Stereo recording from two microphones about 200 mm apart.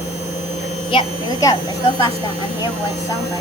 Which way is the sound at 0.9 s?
20° left (ahead or behind).